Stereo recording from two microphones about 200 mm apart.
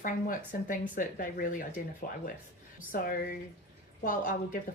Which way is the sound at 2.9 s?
45° left (ahead or behind).